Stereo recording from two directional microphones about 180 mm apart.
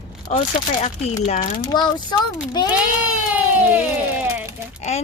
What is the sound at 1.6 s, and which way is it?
Speech, 20° left (ahead or behind).